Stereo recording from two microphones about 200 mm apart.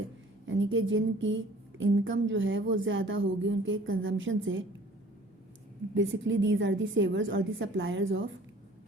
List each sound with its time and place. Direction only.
0.4 s a woman's voice: 70° right (ahead or behind)
5.9 s a woman's voice: 60° right (ahead or behind)